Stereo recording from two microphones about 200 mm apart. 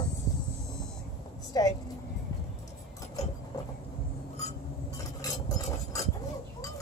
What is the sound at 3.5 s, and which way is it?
Train, 20° left (ahead or behind).